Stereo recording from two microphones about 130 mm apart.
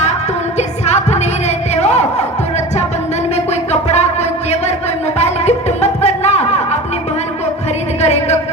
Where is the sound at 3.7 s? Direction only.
60° left (ahead or behind).